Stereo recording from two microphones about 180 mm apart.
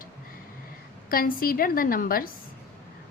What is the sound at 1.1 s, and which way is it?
A woman's voice, 50° left (ahead or behind).